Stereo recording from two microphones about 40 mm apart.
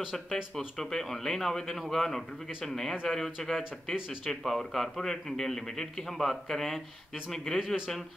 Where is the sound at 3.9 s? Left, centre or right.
Centre.